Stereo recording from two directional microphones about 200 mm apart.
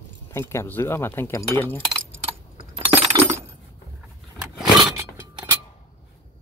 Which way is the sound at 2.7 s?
30° right (ahead or behind).